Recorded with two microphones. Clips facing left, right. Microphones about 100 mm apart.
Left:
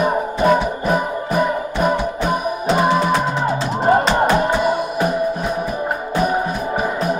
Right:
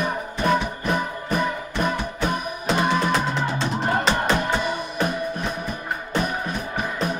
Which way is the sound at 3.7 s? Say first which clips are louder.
Left 10 dB; 40° left (ahead or behind).